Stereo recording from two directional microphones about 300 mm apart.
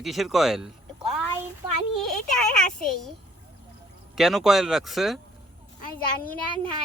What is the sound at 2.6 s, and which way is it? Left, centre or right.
Speech, centre.